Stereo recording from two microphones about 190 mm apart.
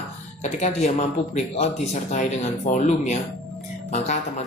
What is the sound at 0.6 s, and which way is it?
Speech, 35° left (ahead or behind).